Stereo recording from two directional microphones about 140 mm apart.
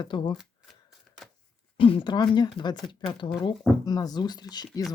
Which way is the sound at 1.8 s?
40° left (ahead or behind).